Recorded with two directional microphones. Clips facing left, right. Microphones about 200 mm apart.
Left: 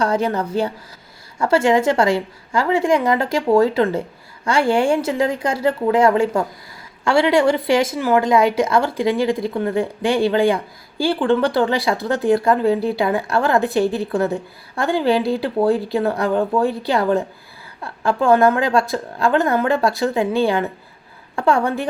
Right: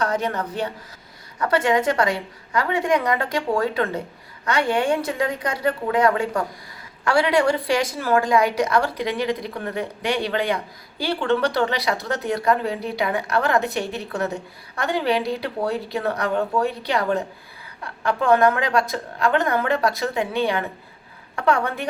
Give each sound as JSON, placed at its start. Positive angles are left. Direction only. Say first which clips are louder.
{"t": 0.0, "sound": "a woman's voice", "louder": "left 4 dB", "side_deg": 30}